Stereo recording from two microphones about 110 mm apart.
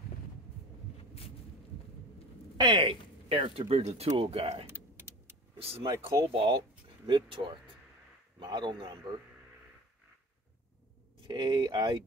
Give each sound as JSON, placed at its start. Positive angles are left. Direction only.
{"t": 2.5, "sound": "speech", "side_deg": -45}
{"t": 4.6, "sound": "vehicle", "side_deg": -20}
{"t": 5.6, "sound": "speech", "side_deg": -60}
{"t": 11.2, "sound": "speech", "side_deg": -45}